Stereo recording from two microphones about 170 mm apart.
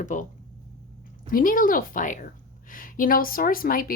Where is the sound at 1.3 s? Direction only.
55° left (ahead or behind).